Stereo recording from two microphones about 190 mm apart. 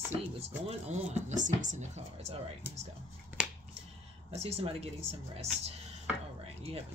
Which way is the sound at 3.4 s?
5° right (ahead or behind).